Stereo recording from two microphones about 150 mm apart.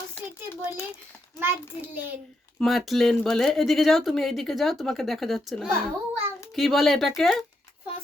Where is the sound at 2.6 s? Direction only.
Centre (ahead or behind).